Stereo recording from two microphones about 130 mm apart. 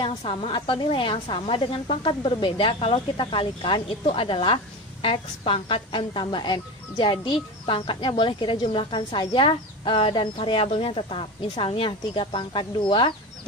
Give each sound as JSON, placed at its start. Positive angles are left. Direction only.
{"t": 0.0, "sound": "a woman's voice", "side_deg": 45}